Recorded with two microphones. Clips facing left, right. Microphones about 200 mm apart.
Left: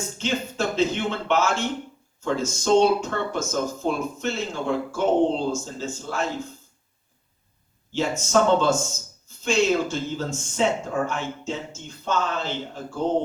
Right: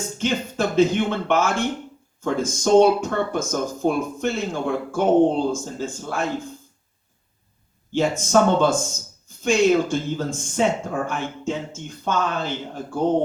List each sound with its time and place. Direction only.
0.2 s speech: 55° right (ahead or behind)
7.9 s speech: 55° right (ahead or behind)